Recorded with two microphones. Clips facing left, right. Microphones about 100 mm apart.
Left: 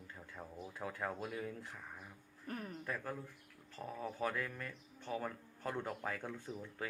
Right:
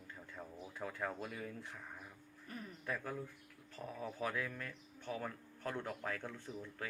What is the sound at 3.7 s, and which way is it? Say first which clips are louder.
Speech: left 1 dB; centre (ahead or behind).